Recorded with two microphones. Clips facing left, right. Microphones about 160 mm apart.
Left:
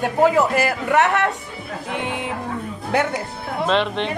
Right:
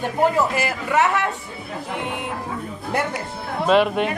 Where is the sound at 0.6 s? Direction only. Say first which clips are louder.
Left 2 dB; 60° left (ahead or behind).